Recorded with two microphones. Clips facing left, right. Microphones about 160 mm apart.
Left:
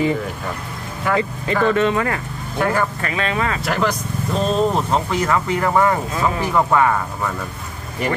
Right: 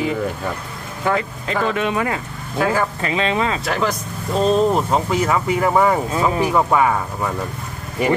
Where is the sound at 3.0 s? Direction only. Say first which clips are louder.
Right 2 dB; 25° right (ahead or behind).